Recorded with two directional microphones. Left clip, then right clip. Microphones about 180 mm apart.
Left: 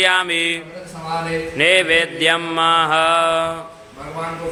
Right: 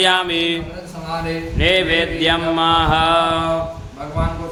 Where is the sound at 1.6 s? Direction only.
30° left (ahead or behind).